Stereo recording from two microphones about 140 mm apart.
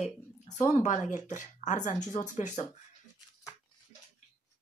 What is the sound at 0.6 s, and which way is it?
Speech, 55° left (ahead or behind).